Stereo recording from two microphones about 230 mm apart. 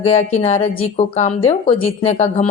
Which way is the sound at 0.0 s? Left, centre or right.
Left.